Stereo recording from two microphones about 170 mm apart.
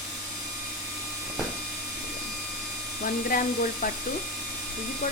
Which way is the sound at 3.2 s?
55° left (ahead or behind).